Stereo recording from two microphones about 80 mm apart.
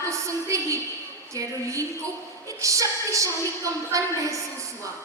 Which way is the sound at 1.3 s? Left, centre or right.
Right.